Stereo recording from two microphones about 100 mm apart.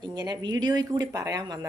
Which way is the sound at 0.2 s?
45° right (ahead or behind).